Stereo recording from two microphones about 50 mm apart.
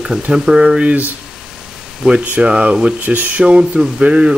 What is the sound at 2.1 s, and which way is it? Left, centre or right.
Speech, right.